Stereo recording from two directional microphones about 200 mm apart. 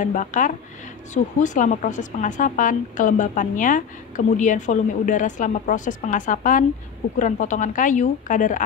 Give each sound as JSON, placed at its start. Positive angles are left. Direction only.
{"t": 0.0, "sound": "speech", "side_deg": 40}